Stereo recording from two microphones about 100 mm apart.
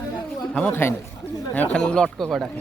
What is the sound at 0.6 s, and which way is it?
Speech, 10° left (ahead or behind).